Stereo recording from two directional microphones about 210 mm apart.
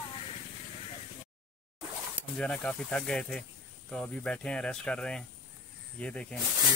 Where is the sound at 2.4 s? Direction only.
5° left (ahead or behind).